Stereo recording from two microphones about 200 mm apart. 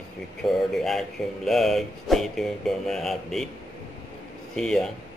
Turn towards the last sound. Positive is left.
turn(degrees=5)  # may be behind; listen again after turning